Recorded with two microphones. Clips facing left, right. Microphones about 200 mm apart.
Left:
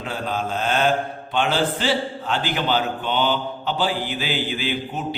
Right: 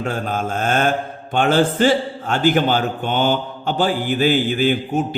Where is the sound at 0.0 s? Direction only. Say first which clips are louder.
Right 4 dB; 50° right (ahead or behind).